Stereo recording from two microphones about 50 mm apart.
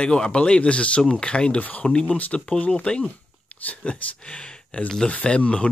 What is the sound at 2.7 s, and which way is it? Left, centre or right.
Speech, centre.